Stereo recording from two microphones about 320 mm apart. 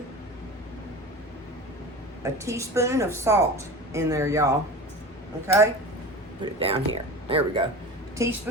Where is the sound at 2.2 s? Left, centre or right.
Centre.